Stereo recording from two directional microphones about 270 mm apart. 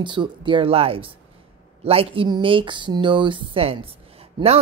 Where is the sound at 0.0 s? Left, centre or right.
Centre.